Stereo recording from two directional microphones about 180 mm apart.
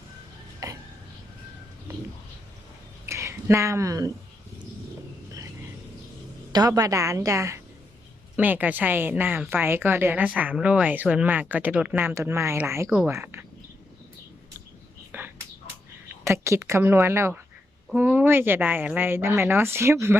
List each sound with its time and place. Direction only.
0.6 s a sound: 20° right (ahead or behind)
3.1 s speech: 15° right (ahead or behind)
6.5 s a woman's voice: 20° right (ahead or behind)
12.9 s speech: 5° right (ahead or behind)
15.1 s a sound: 10° right (ahead or behind)
16.2 s a woman's voice: 15° right (ahead or behind)